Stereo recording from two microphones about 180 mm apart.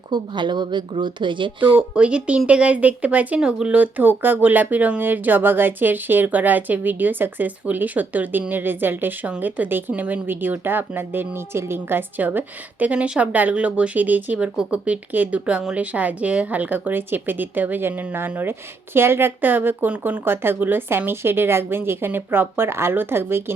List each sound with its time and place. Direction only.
0.1 s speech: 25° right (ahead or behind)
2.0 s speech: 5° right (ahead or behind)